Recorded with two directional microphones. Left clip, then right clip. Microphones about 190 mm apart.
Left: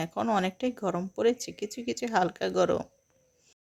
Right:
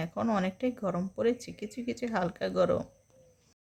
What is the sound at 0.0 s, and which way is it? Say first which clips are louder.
Speech: left 3 dB; 20° left (ahead or behind).